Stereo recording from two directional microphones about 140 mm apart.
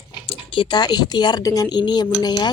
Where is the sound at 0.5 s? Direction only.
35° left (ahead or behind).